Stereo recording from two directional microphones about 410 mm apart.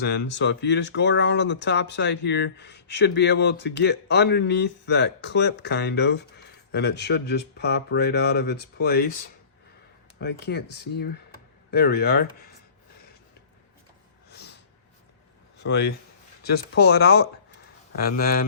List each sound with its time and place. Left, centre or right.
0.0 s speech: left
10.2 s speech: left
14.3 s snort: left
15.6 s speech: left